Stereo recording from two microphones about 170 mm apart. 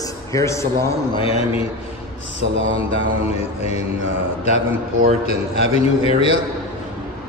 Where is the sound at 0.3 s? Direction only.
15° left (ahead or behind).